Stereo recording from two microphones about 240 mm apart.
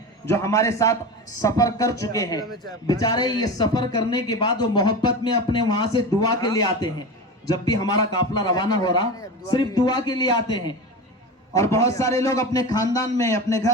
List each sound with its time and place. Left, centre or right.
0.3 s a man's voice: centre